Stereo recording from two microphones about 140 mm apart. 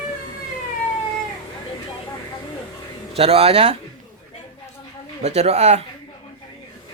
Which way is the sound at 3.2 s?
45° right (ahead or behind).